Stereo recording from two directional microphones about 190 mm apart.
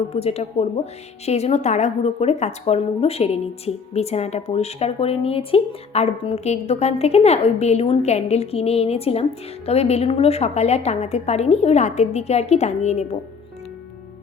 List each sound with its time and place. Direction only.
0.1 s a woman's voice: 30° left (ahead or behind)